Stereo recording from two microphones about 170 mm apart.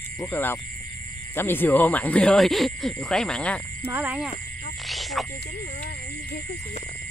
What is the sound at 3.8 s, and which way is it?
Speech, 10° right (ahead or behind).